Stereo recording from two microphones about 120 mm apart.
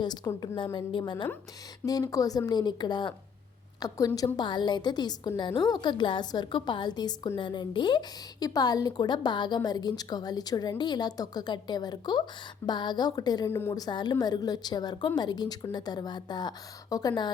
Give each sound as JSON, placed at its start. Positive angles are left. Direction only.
{"t": 0.4, "sound": "a woman's voice", "side_deg": 40}
{"t": 1.8, "sound": "a woman's voice", "side_deg": 30}
{"t": 13.5, "sound": "a woman's voice", "side_deg": 20}
{"t": 13.7, "sound": "a woman's voice", "side_deg": 35}